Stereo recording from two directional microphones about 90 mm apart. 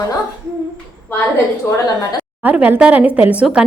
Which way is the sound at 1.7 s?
45° left (ahead or behind).